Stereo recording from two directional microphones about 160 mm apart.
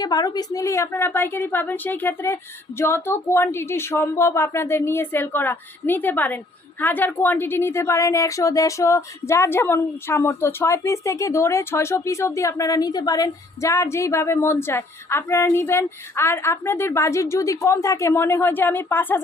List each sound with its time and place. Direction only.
0.0 s a woman's voice: 25° left (ahead or behind)